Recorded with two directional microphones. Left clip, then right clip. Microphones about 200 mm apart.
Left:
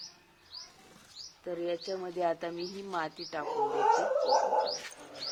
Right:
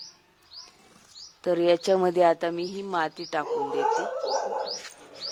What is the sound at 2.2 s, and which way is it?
Speech, 35° right (ahead or behind).